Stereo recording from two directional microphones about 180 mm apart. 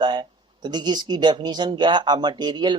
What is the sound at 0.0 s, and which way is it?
Speech, 25° right (ahead or behind).